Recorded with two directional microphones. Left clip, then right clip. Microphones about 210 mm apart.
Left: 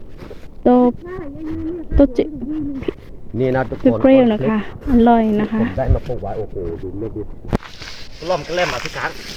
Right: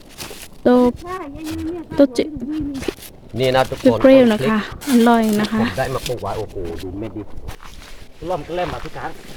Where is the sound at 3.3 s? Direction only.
70° right (ahead or behind).